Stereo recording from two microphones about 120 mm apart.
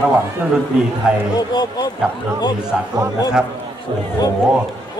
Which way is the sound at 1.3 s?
35° left (ahead or behind).